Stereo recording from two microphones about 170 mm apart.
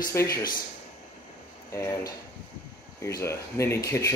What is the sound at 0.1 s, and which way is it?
Speech, 20° left (ahead or behind).